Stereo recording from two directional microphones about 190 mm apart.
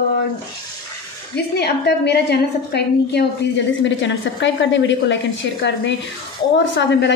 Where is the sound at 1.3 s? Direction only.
60° left (ahead or behind).